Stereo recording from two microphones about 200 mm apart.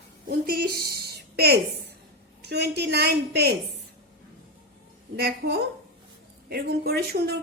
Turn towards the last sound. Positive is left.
turn(degrees=-50)  # may be behind; listen again after turning